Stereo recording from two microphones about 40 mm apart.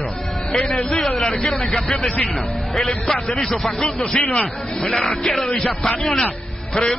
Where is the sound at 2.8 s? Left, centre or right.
Centre.